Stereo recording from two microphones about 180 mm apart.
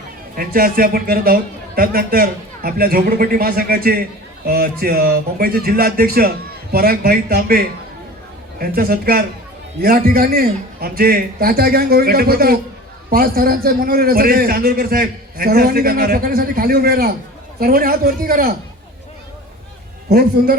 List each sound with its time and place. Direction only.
0.3 s a man's voice: 55° right (ahead or behind)
20.1 s a man's voice: 55° right (ahead or behind)